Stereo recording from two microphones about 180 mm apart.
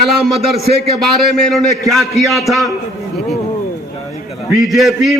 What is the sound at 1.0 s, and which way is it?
A man's voice, centre (ahead or behind).